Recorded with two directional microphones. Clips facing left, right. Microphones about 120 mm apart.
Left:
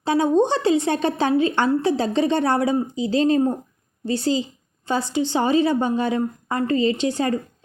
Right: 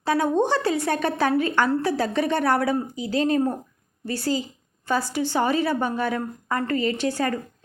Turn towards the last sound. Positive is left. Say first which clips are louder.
# left 3 dB
turn(degrees=20)  # may be behind; listen again after turning